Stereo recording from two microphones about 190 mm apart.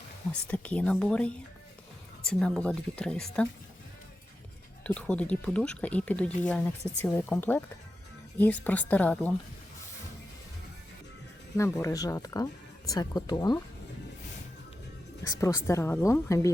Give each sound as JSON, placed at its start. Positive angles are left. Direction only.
{"t": 0.3, "sound": "speech", "side_deg": 10}
{"t": 4.8, "sound": "speech", "side_deg": 5}
{"t": 11.5, "sound": "speech", "side_deg": 15}
{"t": 15.3, "sound": "speech", "side_deg": 15}